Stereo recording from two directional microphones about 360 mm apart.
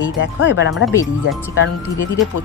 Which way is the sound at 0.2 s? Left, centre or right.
Left.